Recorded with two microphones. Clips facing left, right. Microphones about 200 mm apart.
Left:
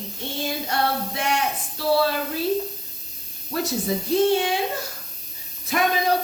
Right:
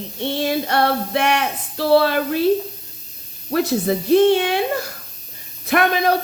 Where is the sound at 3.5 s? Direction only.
65° right (ahead or behind).